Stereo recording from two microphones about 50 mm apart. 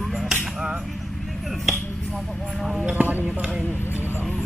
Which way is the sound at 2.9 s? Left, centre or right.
Right.